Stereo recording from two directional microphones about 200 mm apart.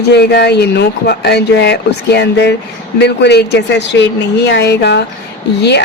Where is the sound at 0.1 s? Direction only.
55° left (ahead or behind).